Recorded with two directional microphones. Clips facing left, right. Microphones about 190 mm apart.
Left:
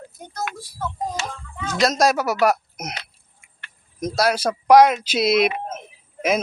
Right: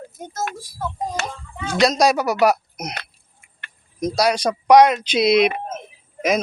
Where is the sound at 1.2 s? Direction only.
60° right (ahead or behind).